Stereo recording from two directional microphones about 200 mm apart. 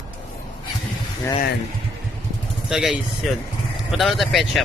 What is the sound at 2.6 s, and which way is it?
Speech, centre (ahead or behind).